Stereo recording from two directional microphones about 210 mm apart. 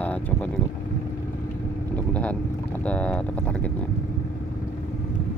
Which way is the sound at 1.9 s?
5° left (ahead or behind).